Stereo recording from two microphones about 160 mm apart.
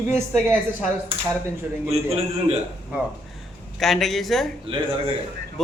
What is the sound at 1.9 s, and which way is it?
Speech, 40° right (ahead or behind).